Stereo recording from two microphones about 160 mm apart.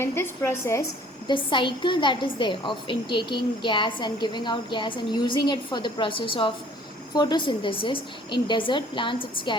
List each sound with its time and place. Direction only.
0.0 s a woman's voice: 15° left (ahead or behind)
1.3 s a woman's voice: 30° left (ahead or behind)